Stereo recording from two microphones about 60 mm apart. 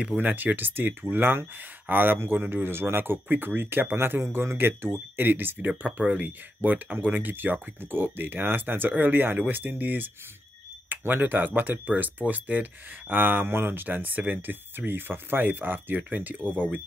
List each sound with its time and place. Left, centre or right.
0.2 s speech: right
5.6 s speech: right